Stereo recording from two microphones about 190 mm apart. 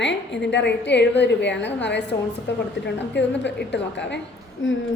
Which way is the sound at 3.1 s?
65° left (ahead or behind).